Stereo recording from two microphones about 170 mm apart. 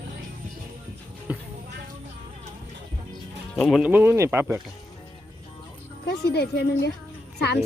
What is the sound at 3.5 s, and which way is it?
Speech, 5° left (ahead or behind).